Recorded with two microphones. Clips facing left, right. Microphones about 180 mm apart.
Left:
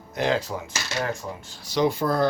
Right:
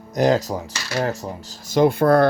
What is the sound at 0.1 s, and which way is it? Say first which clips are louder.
Speech: right 6 dB; 40° right (ahead or behind).